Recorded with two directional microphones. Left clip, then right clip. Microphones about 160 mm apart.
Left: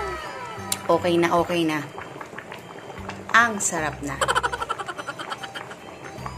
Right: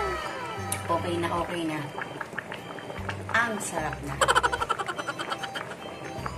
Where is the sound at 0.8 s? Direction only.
90° left.